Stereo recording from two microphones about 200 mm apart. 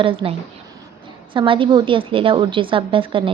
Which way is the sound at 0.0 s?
25° right (ahead or behind).